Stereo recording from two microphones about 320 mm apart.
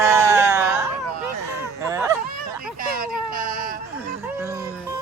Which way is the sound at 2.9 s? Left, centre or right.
Right.